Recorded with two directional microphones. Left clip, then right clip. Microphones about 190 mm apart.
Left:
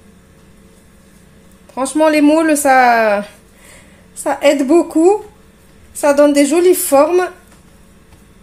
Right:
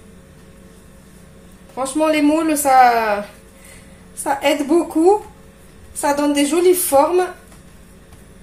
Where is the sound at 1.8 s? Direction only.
55° left (ahead or behind).